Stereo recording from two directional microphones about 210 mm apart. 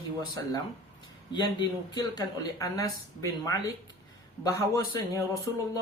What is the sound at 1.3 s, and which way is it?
Speech, 20° left (ahead or behind).